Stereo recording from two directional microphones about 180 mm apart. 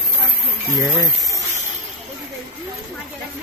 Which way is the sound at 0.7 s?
20° right (ahead or behind).